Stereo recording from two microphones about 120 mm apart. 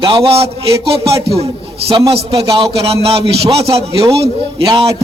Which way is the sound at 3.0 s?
55° right (ahead or behind).